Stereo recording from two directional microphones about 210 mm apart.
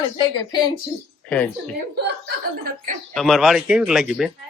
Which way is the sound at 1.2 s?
5° left (ahead or behind).